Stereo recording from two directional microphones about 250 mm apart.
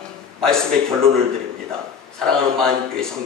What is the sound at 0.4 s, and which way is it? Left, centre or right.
Speech, centre.